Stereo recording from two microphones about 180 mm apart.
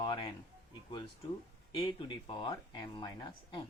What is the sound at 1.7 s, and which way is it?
Speech, 25° left (ahead or behind).